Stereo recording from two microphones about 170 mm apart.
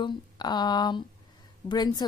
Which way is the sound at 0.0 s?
25° left (ahead or behind).